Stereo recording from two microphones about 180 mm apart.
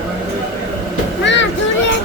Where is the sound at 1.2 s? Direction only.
90° left.